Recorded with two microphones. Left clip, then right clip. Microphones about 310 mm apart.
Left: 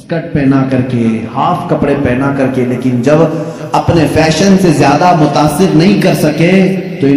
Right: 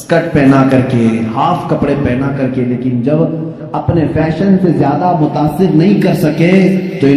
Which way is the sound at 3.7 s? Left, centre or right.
Left.